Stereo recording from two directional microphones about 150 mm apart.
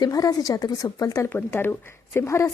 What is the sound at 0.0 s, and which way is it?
A woman's voice, 25° left (ahead or behind).